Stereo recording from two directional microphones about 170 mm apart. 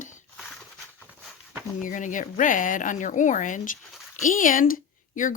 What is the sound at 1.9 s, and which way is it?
Speech, 50° left (ahead or behind).